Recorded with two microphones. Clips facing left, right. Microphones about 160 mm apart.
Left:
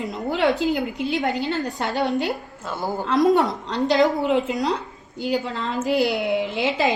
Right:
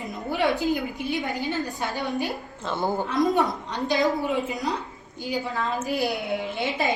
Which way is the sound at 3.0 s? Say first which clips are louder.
Left 7 dB; 90° left.